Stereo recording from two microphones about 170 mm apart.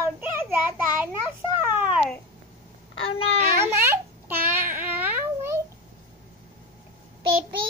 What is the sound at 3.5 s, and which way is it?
Babbling, 15° right (ahead or behind).